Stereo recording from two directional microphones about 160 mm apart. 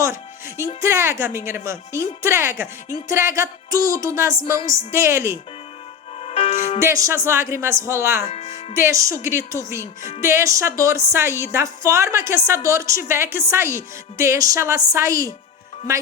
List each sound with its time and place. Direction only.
0.0 s music: 15° right (ahead or behind)
0.8 s speech: 15° right (ahead or behind)
3.1 s music: 20° right (ahead or behind)
4.9 s speech: 15° right (ahead or behind)
6.1 s music: 35° left (ahead or behind)
6.7 s speech: 20° right (ahead or behind)
8.3 s speech: 40° left (ahead or behind)
8.7 s music: 20° right (ahead or behind)
10.2 s speech: 15° right (ahead or behind)
12.6 s music: 20° right (ahead or behind)
13.1 s speech: 15° right (ahead or behind)
14.9 s music: 20° right (ahead or behind)